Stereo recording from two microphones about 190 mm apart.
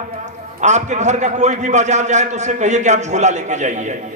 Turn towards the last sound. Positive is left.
turn(degrees=-40)  # may be behind; listen again after turning